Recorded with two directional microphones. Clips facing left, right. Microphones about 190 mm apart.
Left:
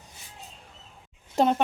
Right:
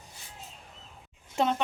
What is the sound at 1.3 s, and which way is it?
Speech, 40° left (ahead or behind).